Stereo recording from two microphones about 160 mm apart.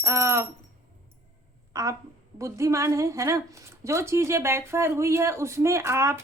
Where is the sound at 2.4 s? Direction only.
20° right (ahead or behind).